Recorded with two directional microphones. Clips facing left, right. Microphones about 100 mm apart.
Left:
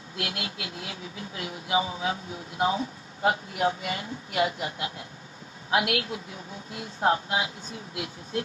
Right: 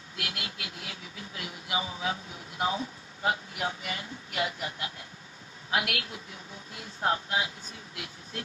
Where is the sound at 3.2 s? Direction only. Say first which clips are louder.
Left 6 dB; 30° left (ahead or behind).